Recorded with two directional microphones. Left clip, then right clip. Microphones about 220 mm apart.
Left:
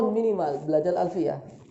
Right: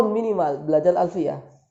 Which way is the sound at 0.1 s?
40° right (ahead or behind).